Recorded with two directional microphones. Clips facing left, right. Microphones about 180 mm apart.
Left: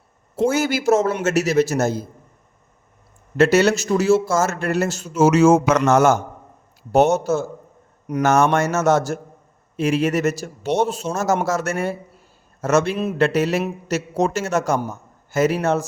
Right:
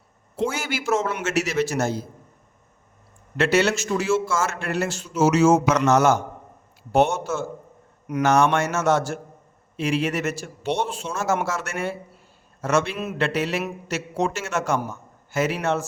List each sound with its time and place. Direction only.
0.3 s a man's voice: 40° left (ahead or behind)
3.3 s a man's voice: 40° left (ahead or behind)